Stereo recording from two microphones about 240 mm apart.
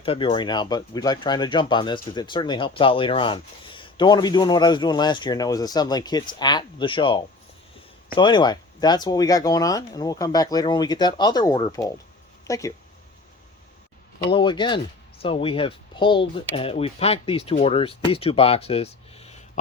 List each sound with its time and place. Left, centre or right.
0.0 s speech: left
14.3 s speech: left